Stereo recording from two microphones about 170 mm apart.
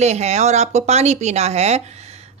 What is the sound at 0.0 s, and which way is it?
Speech, 40° right (ahead or behind).